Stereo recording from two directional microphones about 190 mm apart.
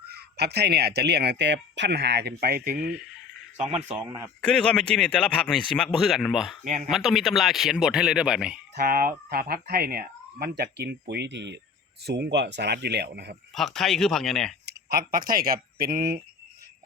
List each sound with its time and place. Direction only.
0.1 s speech: 60° right (ahead or behind)
3.8 s speech: 10° right (ahead or behind)
4.4 s speech: 5° left (ahead or behind)
6.7 s speech: 40° right (ahead or behind)
6.9 s speech: centre (ahead or behind)
8.7 s speech: 50° right (ahead or behind)
13.5 s speech: centre (ahead or behind)
14.7 s speech: 55° right (ahead or behind)